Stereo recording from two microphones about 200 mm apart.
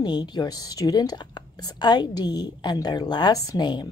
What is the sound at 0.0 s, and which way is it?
A woman's voice, 20° left (ahead or behind).